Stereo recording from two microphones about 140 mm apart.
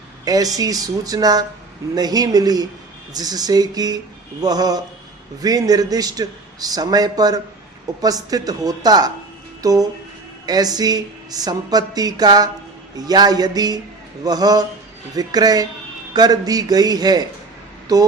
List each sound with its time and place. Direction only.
0.3 s speech: 25° right (ahead or behind)